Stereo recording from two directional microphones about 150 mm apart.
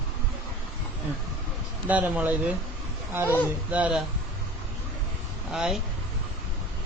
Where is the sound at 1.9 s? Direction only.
10° right (ahead or behind).